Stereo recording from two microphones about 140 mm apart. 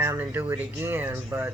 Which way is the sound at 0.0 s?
15° right (ahead or behind).